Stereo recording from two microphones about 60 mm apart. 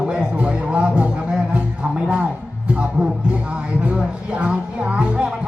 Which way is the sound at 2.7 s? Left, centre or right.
Centre.